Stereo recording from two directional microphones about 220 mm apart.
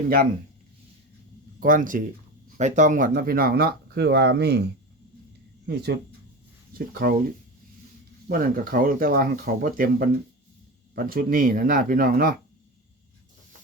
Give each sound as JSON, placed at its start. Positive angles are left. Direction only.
{"t": 1.5, "sound": "speech", "side_deg": -40}
{"t": 5.6, "sound": "speech", "side_deg": -50}
{"t": 8.3, "sound": "speech", "side_deg": -40}